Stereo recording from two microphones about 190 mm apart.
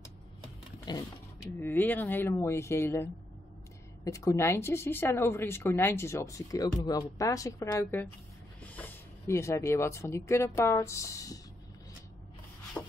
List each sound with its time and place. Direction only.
0.9 s speech: 20° left (ahead or behind)
1.6 s speech: 10° left (ahead or behind)
12.8 s wood: 5° left (ahead or behind)